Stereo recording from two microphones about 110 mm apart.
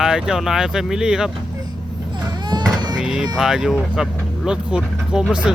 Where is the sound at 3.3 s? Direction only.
5° right (ahead or behind).